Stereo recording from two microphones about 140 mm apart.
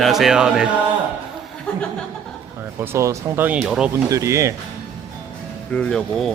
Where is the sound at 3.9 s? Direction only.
20° right (ahead or behind).